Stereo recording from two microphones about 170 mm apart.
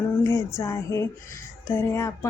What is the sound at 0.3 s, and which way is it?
Speech, 15° left (ahead or behind).